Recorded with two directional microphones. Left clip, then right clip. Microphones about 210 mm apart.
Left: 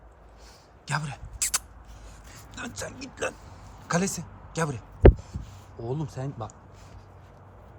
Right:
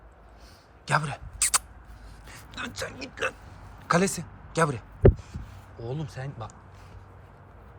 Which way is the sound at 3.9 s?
10° left (ahead or behind).